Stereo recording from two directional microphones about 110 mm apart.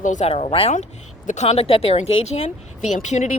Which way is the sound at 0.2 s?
75° left (ahead or behind).